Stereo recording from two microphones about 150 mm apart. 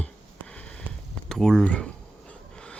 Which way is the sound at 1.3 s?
5° left (ahead or behind).